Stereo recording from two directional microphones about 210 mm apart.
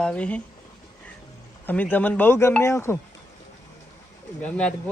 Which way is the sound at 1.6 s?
10° left (ahead or behind).